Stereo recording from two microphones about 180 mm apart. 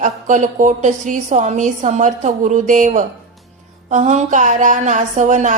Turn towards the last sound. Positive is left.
turn(degrees=-45)  # may be behind; listen again after turning